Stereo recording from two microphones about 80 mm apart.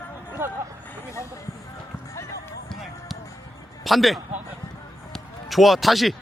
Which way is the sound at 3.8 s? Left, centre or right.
Centre.